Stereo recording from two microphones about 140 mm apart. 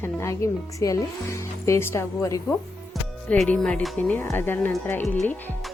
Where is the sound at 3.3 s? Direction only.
5° left (ahead or behind).